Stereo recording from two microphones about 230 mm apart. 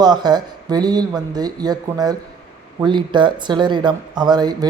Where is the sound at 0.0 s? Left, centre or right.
Centre.